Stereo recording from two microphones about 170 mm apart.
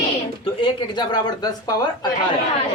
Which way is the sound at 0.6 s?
30° left (ahead or behind).